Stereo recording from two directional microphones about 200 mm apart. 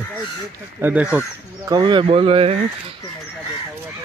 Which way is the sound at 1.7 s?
25° right (ahead or behind).